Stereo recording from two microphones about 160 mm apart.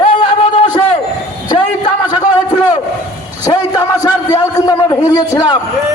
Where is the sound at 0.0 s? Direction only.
30° left (ahead or behind).